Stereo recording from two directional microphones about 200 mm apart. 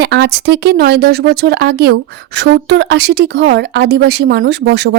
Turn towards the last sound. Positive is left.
turn(degrees=-60)  # may be behind; listen again after turning